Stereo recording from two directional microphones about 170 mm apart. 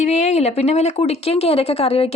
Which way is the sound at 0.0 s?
40° left (ahead or behind).